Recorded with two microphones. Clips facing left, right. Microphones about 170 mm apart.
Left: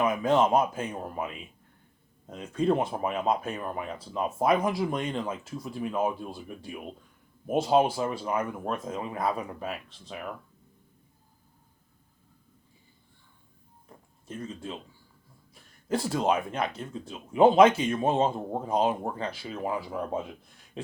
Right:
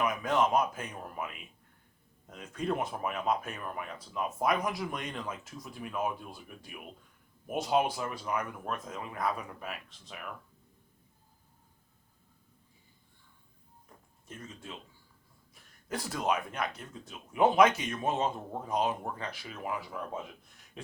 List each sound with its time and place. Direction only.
0.0 s speech: 25° left (ahead or behind)
14.3 s speech: 30° left (ahead or behind)
15.9 s speech: 30° left (ahead or behind)
20.8 s a sound: 30° left (ahead or behind)